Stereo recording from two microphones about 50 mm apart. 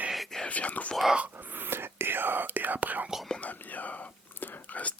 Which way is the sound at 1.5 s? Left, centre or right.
Right.